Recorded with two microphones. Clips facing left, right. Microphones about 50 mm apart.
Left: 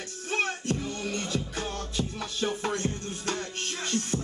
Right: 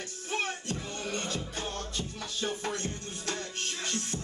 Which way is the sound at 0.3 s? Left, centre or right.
Left.